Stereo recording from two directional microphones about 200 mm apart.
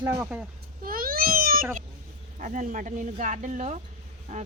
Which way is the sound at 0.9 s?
45° right (ahead or behind).